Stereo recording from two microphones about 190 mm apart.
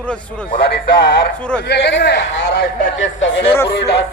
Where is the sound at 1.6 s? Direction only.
60° left (ahead or behind).